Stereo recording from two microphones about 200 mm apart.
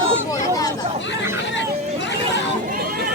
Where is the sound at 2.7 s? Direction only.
45° right (ahead or behind).